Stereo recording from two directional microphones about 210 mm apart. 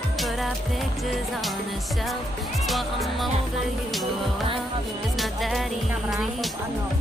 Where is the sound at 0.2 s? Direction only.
Centre (ahead or behind).